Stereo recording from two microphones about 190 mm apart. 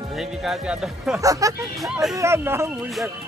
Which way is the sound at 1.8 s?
Centre (ahead or behind).